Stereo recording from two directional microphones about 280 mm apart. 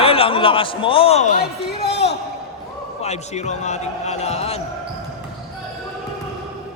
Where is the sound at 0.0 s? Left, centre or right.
Centre.